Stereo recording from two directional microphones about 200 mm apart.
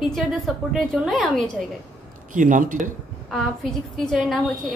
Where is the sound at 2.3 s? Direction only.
40° right (ahead or behind).